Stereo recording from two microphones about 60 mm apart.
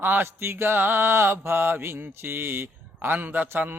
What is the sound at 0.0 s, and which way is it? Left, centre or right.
Mantra, right.